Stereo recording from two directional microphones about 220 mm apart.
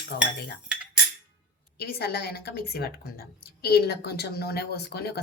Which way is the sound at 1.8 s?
45° left (ahead or behind).